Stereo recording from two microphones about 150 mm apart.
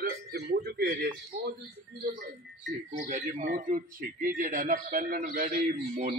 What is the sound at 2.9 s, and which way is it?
A man's voice, 55° right (ahead or behind).